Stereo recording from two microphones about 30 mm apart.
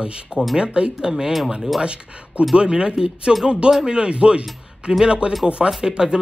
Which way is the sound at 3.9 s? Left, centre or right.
Right.